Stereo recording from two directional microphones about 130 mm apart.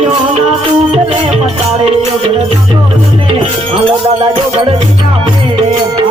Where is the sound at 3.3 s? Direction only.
45° right (ahead or behind).